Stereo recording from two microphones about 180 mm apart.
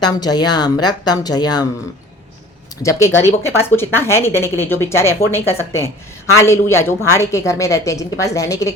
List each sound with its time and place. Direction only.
0.0 s a woman's voice: 25° left (ahead or behind)
2.8 s speech: 15° left (ahead or behind)